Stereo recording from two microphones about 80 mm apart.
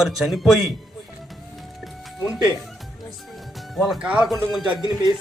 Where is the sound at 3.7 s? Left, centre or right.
Centre.